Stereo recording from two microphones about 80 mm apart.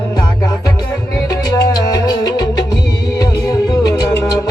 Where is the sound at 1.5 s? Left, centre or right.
Left.